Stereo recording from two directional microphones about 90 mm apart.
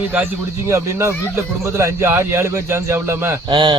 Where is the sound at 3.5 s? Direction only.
65° right (ahead or behind).